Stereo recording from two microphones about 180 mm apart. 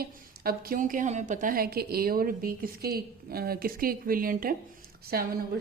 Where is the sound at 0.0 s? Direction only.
55° right (ahead or behind).